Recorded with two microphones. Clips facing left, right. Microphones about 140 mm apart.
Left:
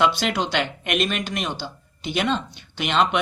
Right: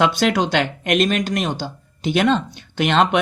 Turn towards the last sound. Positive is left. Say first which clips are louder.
# right 4 dB
turn(degrees=-50)  # may be behind; listen again after turning